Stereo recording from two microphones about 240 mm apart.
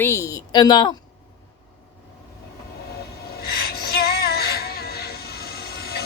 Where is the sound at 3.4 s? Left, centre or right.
Left.